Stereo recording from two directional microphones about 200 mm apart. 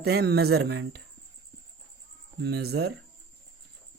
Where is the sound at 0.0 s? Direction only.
55° right (ahead or behind).